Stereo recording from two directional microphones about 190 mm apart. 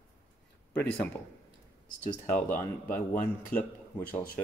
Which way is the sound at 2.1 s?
10° left (ahead or behind).